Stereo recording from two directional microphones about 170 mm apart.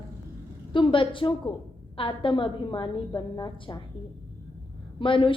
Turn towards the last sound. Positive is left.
turn(degrees=30)  # may be behind; listen again after turning